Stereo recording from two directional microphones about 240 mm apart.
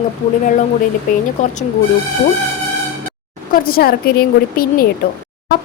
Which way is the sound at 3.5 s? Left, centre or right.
Left.